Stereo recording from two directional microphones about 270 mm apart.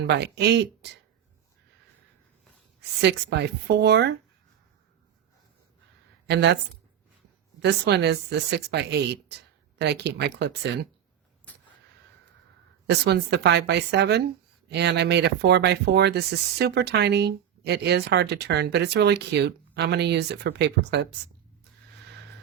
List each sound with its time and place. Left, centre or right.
0.1 s speech: right
3.0 s speech: right
6.2 s a woman's voice: right
7.6 s speech: right
12.9 s speech: right